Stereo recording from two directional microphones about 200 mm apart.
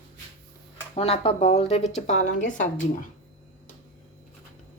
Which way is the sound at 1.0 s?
30° left (ahead or behind).